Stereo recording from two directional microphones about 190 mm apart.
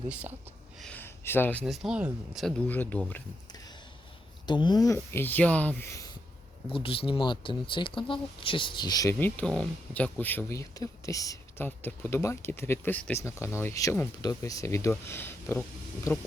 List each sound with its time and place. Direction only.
0.1 s speech: 10° right (ahead or behind)
0.8 s speech: 5° left (ahead or behind)
1.6 s speech: centre (ahead or behind)
4.4 s speech: 25° left (ahead or behind)
6.7 s speech: 30° left (ahead or behind)
9.1 s speech: 10° left (ahead or behind)